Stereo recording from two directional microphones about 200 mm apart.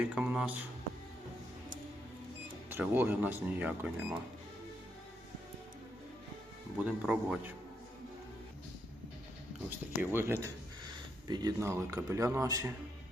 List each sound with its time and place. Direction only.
0.2 s speech: 5° right (ahead or behind)
2.6 s speech: 10° right (ahead or behind)
6.8 s speech: 5° right (ahead or behind)
9.6 s speech: 10° right (ahead or behind)